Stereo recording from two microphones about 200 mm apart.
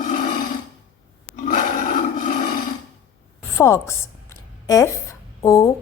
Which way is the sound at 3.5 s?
15° left (ahead or behind).